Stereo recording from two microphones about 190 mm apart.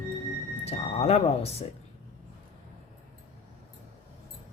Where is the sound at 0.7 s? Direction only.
35° left (ahead or behind).